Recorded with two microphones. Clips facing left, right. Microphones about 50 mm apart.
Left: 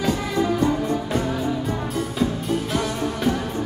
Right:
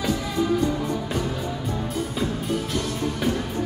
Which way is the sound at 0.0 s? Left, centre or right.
Left.